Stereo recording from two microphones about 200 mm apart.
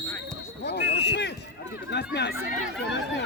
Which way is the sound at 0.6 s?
55° left (ahead or behind).